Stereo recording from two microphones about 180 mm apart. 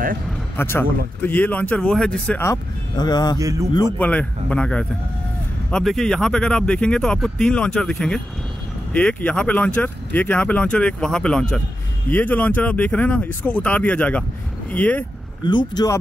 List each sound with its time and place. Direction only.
0.6 s speech: 10° left (ahead or behind)
3.3 s a man's voice: 20° right (ahead or behind)
4.0 s speech: 5° left (ahead or behind)
15.4 s speech: 25° left (ahead or behind)